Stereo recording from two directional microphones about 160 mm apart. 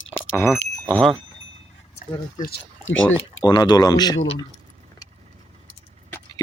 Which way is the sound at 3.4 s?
25° left (ahead or behind).